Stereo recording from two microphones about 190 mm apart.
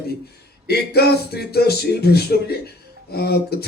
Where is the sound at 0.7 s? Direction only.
55° left (ahead or behind).